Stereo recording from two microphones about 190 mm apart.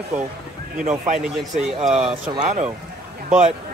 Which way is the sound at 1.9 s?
5° right (ahead or behind).